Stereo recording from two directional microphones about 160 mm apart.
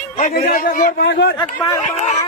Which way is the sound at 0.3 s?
60° left (ahead or behind).